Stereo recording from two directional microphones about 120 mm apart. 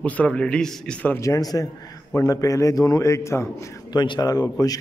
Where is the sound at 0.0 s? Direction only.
10° left (ahead or behind).